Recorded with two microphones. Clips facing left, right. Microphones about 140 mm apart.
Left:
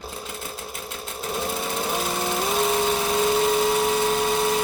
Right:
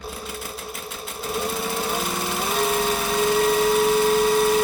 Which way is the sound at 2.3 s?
Centre (ahead or behind).